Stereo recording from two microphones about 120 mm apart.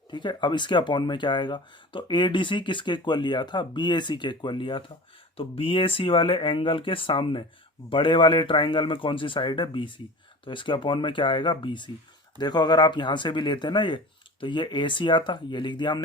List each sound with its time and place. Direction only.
0.1 s speech: 40° left (ahead or behind)